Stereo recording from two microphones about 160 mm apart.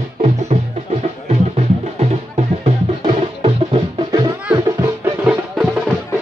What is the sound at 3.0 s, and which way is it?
Music, 30° right (ahead or behind).